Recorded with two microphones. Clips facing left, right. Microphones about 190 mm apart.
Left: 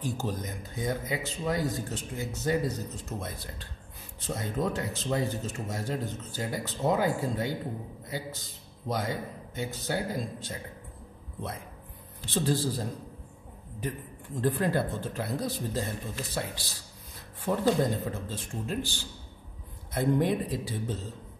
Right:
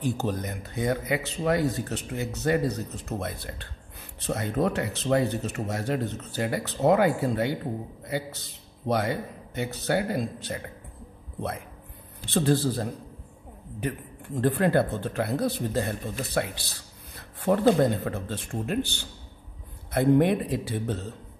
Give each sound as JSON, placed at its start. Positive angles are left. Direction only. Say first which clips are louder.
{"t": 0.0, "sound": "a man's voice", "louder": "right 5 dB", "side_deg": -65}
{"t": 12.4, "sound": "speech", "louder": "right 5 dB", "side_deg": -65}
{"t": 13.8, "sound": "a man's voice", "louder": "right 4 dB", "side_deg": -65}